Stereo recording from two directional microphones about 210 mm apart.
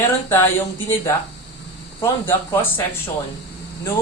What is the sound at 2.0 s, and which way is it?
Speech, 10° left (ahead or behind).